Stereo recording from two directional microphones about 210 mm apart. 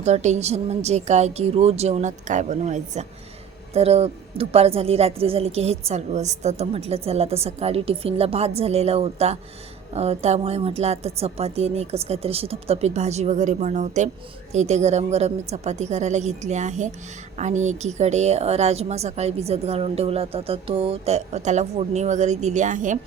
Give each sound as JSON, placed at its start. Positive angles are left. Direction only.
{"t": 0.0, "sound": "a woman's voice", "side_deg": -30}